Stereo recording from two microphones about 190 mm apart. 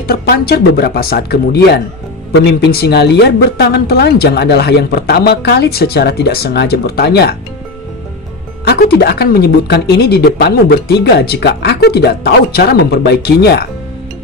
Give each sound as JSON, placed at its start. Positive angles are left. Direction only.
{"t": 0.0, "sound": "speech", "side_deg": 55}
{"t": 8.6, "sound": "speech", "side_deg": 55}